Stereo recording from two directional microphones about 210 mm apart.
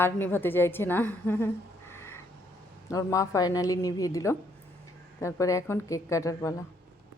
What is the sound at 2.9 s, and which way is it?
Speech, 15° left (ahead or behind).